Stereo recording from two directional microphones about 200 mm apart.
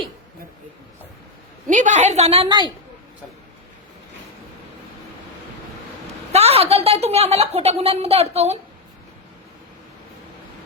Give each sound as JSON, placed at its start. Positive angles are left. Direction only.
{"t": 1.6, "sound": "a woman's voice", "side_deg": -40}
{"t": 6.3, "sound": "a woman's voice", "side_deg": -30}